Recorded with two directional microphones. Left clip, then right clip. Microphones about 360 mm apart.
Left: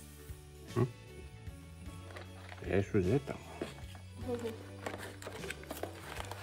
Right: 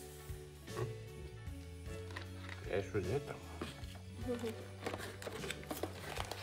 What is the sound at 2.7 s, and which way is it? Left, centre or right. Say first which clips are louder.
Speech: left 6 dB; left.